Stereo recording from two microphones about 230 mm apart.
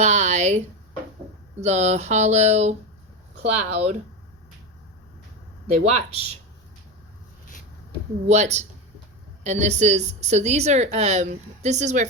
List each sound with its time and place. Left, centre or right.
0.0 s speech: right
1.6 s a woman's voice: right
5.6 s a woman's voice: right
8.3 s a woman's voice: right